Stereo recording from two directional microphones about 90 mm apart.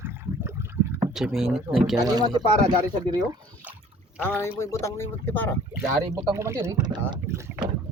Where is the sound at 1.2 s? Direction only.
5° right (ahead or behind).